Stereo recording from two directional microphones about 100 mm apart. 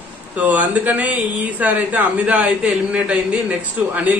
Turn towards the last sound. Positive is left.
turn(degrees=-10)  # may be behind; listen again after turning